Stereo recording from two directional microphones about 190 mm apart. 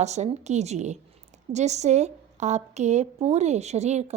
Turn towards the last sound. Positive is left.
turn(degrees=-35)  # may be behind; listen again after turning